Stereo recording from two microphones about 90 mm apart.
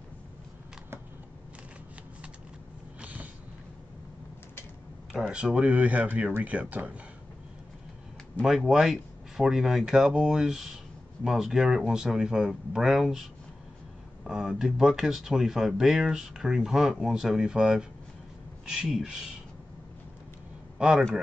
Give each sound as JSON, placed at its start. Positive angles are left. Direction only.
{"t": 3.0, "sound": "a sound", "side_deg": -15}
{"t": 5.1, "sound": "speech", "side_deg": -10}
{"t": 8.4, "sound": "speech", "side_deg": -5}
{"t": 20.7, "sound": "speech", "side_deg": -5}